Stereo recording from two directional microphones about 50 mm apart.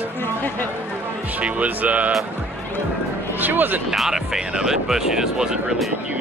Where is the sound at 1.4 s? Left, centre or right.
Right.